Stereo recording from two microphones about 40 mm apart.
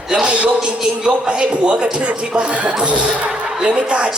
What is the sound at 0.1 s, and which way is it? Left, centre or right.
Speech, right.